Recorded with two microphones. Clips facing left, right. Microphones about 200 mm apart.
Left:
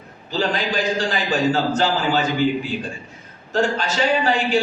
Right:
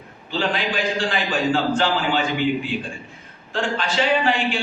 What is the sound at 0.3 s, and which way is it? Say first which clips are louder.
A man's voice: left 1 dB; 40° left (ahead or behind).